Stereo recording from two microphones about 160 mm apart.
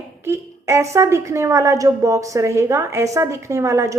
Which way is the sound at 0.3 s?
15° right (ahead or behind).